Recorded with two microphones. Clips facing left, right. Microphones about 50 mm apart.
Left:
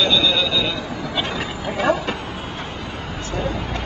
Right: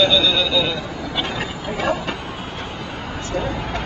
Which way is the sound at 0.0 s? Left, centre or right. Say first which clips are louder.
Right 1 dB; centre.